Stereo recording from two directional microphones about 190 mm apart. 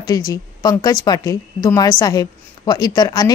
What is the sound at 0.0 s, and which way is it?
A woman's voice, 20° left (ahead or behind).